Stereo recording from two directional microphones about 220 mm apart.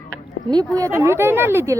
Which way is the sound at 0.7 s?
15° right (ahead or behind).